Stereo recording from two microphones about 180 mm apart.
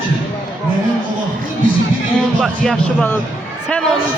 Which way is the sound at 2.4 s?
5° left (ahead or behind).